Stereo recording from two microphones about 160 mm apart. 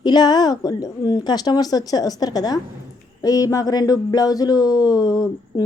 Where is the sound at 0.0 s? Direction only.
25° left (ahead or behind).